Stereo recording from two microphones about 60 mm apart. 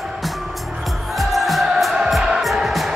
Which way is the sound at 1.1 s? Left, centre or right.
Centre.